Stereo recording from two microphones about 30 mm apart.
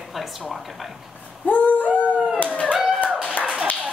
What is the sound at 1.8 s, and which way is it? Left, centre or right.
Howl, right.